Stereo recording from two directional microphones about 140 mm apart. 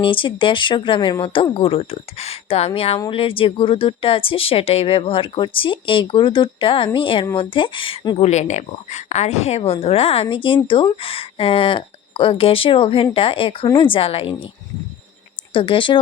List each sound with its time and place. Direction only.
0.0 s speech: 35° left (ahead or behind)
8.3 s a woman's voice: 55° left (ahead or behind)
15.5 s speech: 40° left (ahead or behind)